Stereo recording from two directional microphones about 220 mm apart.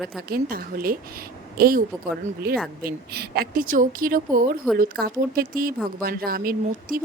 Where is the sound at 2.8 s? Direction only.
45° right (ahead or behind).